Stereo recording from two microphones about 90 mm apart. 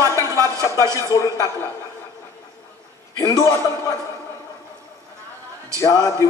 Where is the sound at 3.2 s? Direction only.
40° left (ahead or behind).